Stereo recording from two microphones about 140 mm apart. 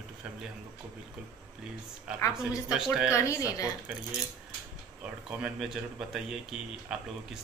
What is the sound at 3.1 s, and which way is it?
Speech, 20° left (ahead or behind).